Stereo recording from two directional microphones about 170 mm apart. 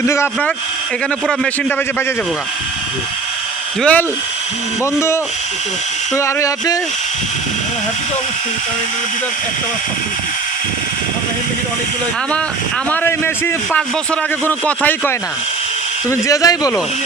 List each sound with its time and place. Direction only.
0.0 s a man's voice: 15° left (ahead or behind)
3.8 s a man's voice: 10° left (ahead or behind)
12.9 s a man's voice: 10° left (ahead or behind)
14.4 s a man's voice: 10° left (ahead or behind)